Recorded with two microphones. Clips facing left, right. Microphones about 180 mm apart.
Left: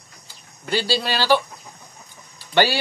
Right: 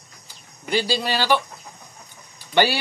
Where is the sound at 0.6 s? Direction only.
15° right (ahead or behind).